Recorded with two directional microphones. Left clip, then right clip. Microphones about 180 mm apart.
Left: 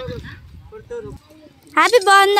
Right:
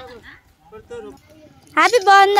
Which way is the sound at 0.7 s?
15° right (ahead or behind).